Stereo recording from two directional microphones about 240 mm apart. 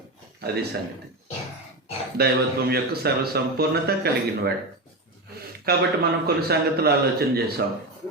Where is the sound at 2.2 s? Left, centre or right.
Right.